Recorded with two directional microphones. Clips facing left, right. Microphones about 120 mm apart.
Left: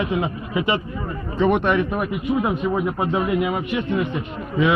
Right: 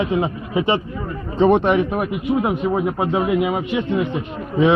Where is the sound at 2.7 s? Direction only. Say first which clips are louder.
Right 2 dB; 30° right (ahead or behind).